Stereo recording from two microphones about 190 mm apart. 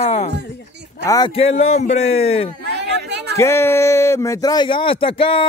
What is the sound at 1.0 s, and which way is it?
Speech, 20° left (ahead or behind).